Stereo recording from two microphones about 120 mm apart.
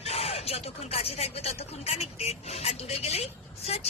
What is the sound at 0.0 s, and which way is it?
Speech, 55° left (ahead or behind).